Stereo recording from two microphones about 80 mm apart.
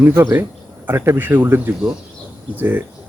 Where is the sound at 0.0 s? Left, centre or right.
Right.